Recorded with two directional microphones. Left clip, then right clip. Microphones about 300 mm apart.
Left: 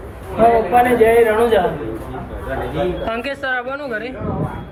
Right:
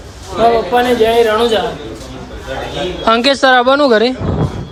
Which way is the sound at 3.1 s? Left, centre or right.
Right.